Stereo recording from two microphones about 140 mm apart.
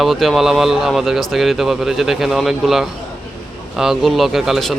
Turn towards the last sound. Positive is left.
turn(degrees=0)  # may be behind; listen again after turning